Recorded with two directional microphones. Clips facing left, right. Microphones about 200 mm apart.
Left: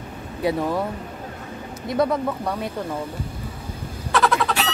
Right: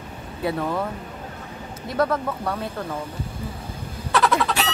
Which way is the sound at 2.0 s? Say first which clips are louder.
Left 1 dB; 15° left (ahead or behind).